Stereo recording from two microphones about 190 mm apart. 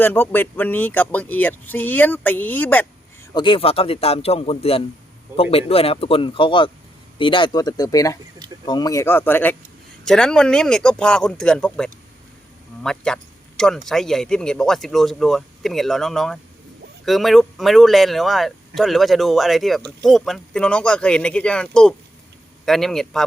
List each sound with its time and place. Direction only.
0.0 s speech: 10° left (ahead or behind)
3.3 s a man's voice: 25° left (ahead or behind); by 23.2 s centre (ahead or behind)